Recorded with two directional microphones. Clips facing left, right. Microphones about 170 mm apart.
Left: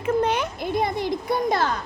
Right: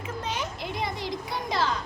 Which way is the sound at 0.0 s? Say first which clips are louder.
Left 11 dB; 60° left (ahead or behind).